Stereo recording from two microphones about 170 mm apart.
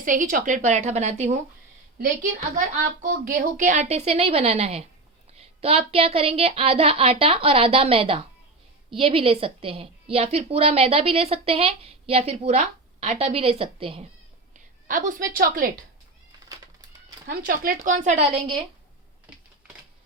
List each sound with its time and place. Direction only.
0.0 s speech: 50° right (ahead or behind)
2.6 s a woman's voice: 50° right (ahead or behind); by 14.1 s 35° right (ahead or behind)
14.5 s speech: 50° right (ahead or behind)
17.2 s speech: 55° right (ahead or behind); by 18.6 s 30° right (ahead or behind)